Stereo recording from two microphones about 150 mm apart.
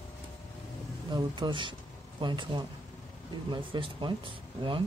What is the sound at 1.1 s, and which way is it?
Speech, 30° right (ahead or behind).